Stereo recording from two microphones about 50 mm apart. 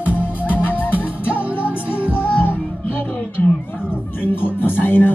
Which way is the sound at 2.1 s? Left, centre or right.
Left.